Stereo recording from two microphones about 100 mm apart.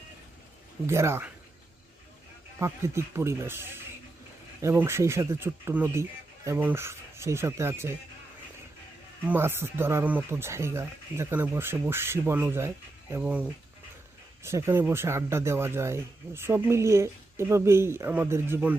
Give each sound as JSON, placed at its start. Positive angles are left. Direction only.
{"t": 0.9, "sound": "speech", "side_deg": -25}
{"t": 2.6, "sound": "speech", "side_deg": -25}
{"t": 9.2, "sound": "speech", "side_deg": -20}
{"t": 14.4, "sound": "speech", "side_deg": -25}